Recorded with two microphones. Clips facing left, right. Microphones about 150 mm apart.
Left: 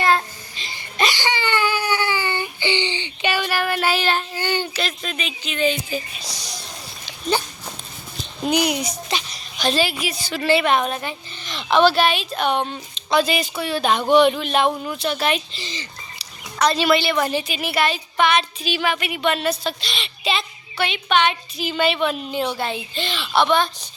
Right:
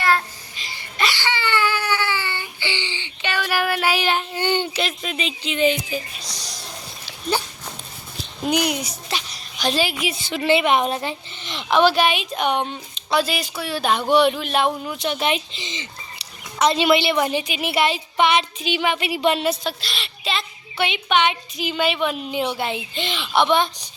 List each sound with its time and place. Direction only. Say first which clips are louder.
0.0 s baby cry: left 2 dB; 25° left (ahead or behind)
3.4 s child singing: right 4 dB; 10° right (ahead or behind)
7.0 s dog: left 2 dB; 10° right (ahead or behind)
8.5 s a sound: left 2 dB; centre (ahead or behind)
10.0 s speech: right 1 dB; 20° right (ahead or behind); by 14.9 s 5° right (ahead or behind)
14.9 s a woman's voice: left 1 dB; 20° right (ahead or behind)
19.8 s a sound: left 3 dB; centre (ahead or behind)
20.7 s speech: even; 20° right (ahead or behind)